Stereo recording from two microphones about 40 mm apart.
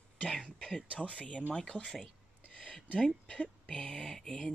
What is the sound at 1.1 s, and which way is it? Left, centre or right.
Speech, left.